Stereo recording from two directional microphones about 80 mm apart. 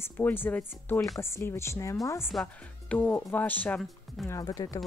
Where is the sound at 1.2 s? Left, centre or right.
Left.